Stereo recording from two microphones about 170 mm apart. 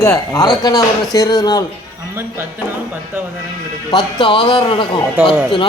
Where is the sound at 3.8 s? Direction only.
25° left (ahead or behind).